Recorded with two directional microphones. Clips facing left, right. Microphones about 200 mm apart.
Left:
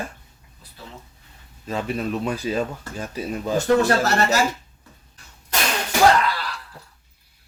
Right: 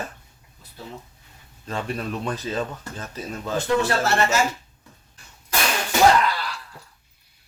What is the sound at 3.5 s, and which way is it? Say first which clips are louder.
Speech: left 4 dB; 40° left (ahead or behind).